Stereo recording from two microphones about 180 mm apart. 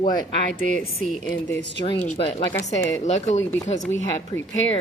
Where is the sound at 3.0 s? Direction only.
40° left (ahead or behind).